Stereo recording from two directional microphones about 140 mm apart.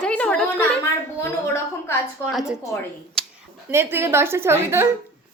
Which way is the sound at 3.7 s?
15° right (ahead or behind).